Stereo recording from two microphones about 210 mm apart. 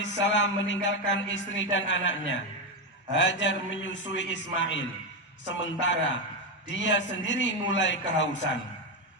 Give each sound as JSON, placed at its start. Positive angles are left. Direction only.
{"t": 0.0, "sound": "speech", "side_deg": 60}